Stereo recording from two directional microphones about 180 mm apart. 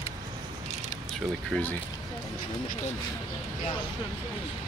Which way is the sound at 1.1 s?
5° left (ahead or behind).